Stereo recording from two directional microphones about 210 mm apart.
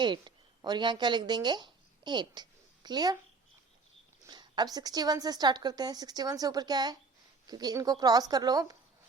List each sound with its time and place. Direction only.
0.0 s speech: 20° right (ahead or behind)
4.3 s a woman's voice: 20° right (ahead or behind)